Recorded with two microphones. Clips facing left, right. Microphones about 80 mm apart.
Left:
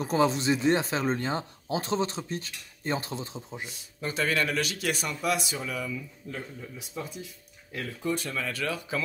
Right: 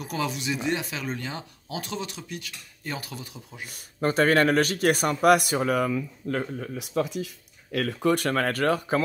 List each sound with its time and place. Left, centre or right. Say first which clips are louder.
0.0 s speech: left 5 dB; left
3.6 s speech: right 11 dB; right